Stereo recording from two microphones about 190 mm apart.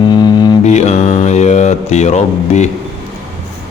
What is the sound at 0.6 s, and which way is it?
Mantra, 35° left (ahead or behind).